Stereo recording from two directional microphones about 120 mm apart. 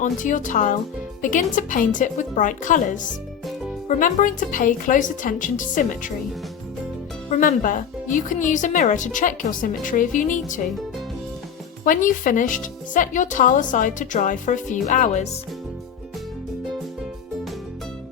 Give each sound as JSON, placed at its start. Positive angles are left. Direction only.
{"t": 0.0, "sound": "speech", "side_deg": 90}
{"t": 7.3, "sound": "speech", "side_deg": 90}
{"t": 11.9, "sound": "speech", "side_deg": 90}